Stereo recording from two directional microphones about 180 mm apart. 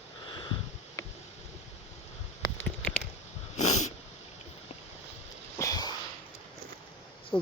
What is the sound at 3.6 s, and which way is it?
Wheeze, 40° left (ahead or behind).